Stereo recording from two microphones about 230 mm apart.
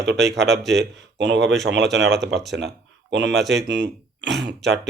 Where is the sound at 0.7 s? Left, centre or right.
Right.